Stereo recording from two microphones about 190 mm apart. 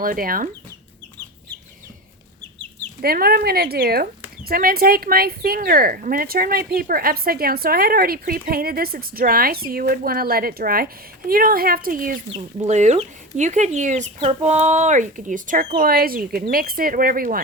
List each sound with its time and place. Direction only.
0.0 s speech: 50° right (ahead or behind)
3.0 s speech: 50° right (ahead or behind)